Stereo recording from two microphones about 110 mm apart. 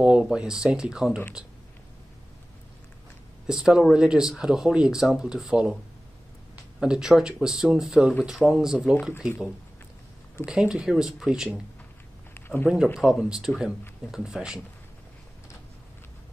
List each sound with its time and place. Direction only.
0.0 s speech: 10° right (ahead or behind)
3.4 s speech: 5° right (ahead or behind)
10.4 s speech: 5° right (ahead or behind)
12.4 s a sound: 20° left (ahead or behind)
12.6 s speech: centre (ahead or behind)